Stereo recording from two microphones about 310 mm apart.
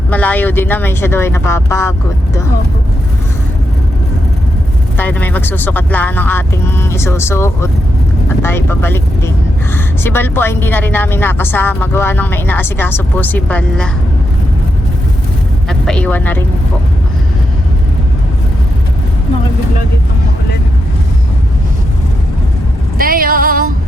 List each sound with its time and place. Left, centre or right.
0.1 s speech: centre
4.9 s speech: centre
15.9 s speech: centre
23.0 s female singing: right